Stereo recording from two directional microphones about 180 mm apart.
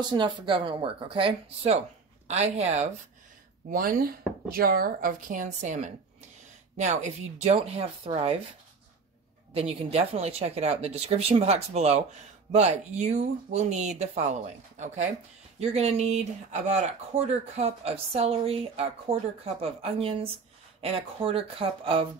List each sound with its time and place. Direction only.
0.1 s speech: 25° right (ahead or behind)
3.7 s a woman's voice: 55° right (ahead or behind); by 8.4 s 30° right (ahead or behind)
9.5 s speech: 35° right (ahead or behind)